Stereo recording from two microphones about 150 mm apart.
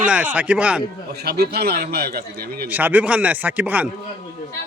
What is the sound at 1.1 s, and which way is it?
A man's voice, 90° right.